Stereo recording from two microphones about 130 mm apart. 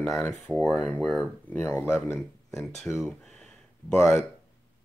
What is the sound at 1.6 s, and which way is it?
Speech, 20° left (ahead or behind).